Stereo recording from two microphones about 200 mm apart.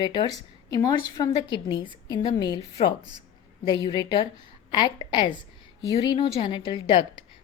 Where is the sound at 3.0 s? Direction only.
20° right (ahead or behind).